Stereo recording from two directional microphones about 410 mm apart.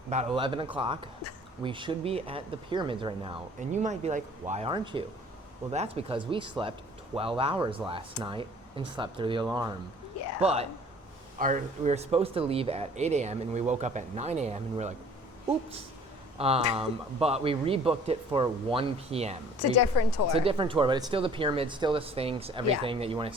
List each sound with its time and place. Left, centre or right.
0.1 s speech: centre
16.4 s speech: centre
19.9 s a woman's voice: left
20.3 s speech: centre